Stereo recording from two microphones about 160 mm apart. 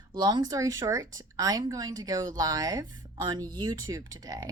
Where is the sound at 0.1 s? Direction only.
30° right (ahead or behind).